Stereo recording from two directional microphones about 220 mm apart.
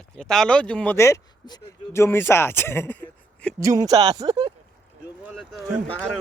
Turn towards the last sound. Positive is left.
turn(degrees=5)  # may be behind; listen again after turning